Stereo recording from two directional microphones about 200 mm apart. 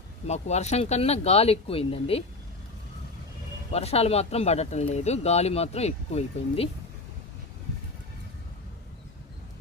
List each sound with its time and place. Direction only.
0.3 s speech: 35° left (ahead or behind)
3.7 s speech: 30° left (ahead or behind)